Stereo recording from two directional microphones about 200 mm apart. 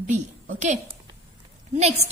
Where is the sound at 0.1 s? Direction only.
40° right (ahead or behind).